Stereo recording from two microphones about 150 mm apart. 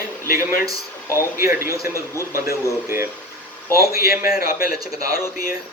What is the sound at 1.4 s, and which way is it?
Speech, 75° left (ahead or behind).